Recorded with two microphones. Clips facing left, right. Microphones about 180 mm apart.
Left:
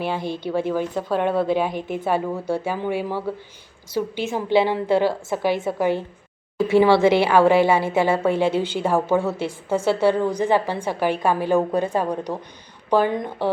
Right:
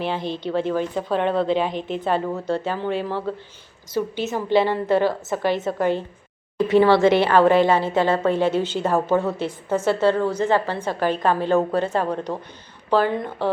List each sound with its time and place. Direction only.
0.2 s speech: 20° right (ahead or behind)
0.5 s a woman's voice: 10° left (ahead or behind)